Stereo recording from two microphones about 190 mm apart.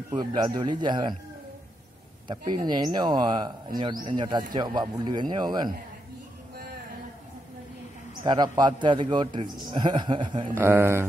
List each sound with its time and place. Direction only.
0.1 s speech: 20° right (ahead or behind)
2.2 s speech: 25° right (ahead or behind)
8.2 s speech: 25° right (ahead or behind)
10.5 s speech: 10° right (ahead or behind)